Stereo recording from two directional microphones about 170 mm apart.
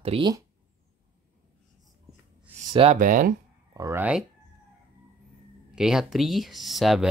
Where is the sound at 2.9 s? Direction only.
50° right (ahead or behind).